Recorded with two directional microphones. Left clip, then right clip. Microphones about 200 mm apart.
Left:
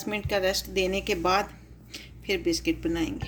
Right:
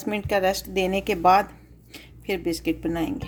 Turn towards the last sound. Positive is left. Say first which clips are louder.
# right 2 dB
turn(degrees=-35)  # may be behind; listen again after turning